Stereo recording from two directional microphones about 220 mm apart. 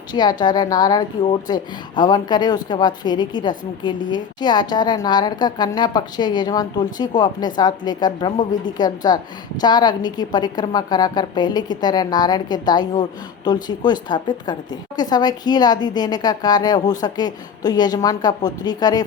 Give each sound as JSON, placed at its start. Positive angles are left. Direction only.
{"t": 0.1, "sound": "a woman's voice", "side_deg": 20}